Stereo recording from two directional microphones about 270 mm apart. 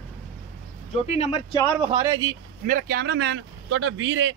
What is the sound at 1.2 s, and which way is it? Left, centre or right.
Speech, left.